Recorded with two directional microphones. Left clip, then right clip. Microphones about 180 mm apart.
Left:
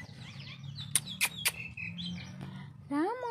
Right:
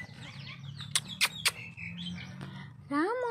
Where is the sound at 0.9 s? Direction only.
25° left (ahead or behind).